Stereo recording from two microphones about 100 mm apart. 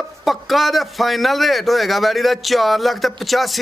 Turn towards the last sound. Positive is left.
turn(degrees=0)  # may be behind; listen again after turning